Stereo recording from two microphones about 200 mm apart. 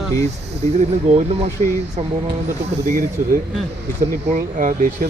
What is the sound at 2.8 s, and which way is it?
Speech, 40° right (ahead or behind).